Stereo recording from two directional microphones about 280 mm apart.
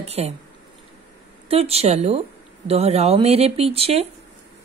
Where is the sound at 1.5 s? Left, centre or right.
Right.